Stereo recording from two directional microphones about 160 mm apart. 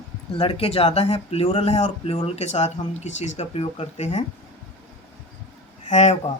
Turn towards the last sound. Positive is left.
turn(degrees=45)  # may be behind; listen again after turning